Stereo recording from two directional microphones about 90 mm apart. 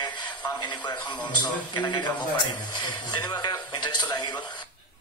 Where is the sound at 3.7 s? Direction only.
60° left (ahead or behind).